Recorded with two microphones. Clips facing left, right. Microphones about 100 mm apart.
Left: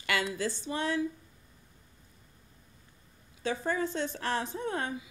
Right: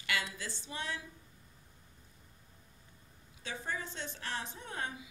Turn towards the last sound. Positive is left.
turn(degrees=55)  # may be behind; listen again after turning